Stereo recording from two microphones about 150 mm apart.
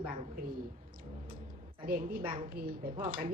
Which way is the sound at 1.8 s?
75° right (ahead or behind).